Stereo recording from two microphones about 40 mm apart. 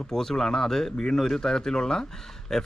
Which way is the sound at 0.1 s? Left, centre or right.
Centre.